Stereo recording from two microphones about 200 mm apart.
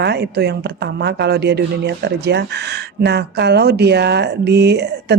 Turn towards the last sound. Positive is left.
turn(degrees=-55)  # may be behind; listen again after turning